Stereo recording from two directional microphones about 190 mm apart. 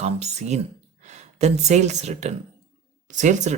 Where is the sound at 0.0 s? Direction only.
35° right (ahead or behind).